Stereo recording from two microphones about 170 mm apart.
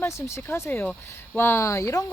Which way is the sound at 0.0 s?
15° left (ahead or behind).